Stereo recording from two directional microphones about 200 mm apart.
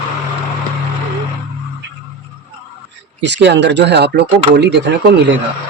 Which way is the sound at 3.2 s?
60° right (ahead or behind).